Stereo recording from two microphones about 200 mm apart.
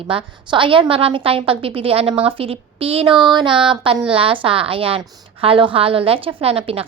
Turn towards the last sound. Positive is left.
turn(degrees=-30)  # may be behind; listen again after turning